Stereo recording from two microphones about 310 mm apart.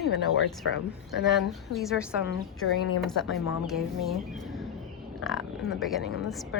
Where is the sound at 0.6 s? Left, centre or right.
Left.